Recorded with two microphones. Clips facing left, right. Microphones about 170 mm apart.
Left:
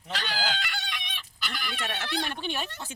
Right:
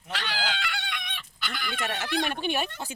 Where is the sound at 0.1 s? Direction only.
35° left (ahead or behind).